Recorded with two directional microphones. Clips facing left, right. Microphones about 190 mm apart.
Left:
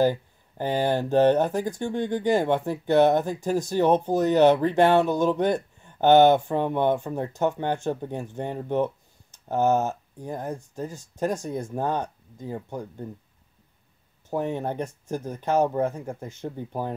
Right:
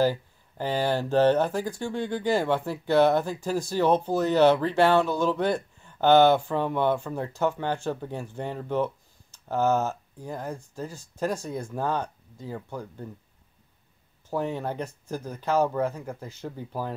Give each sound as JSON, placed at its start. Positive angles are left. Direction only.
{"t": 0.0, "sound": "speech", "side_deg": 20}
{"t": 14.3, "sound": "speech", "side_deg": 20}